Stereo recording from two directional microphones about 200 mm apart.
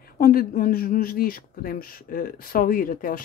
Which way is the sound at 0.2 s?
45° left (ahead or behind).